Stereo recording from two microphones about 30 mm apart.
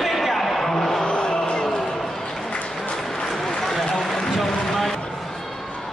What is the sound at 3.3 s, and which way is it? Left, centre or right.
Run, centre.